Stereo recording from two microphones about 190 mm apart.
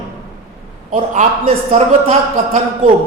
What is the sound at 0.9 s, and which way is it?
A man's voice, 40° right (ahead or behind).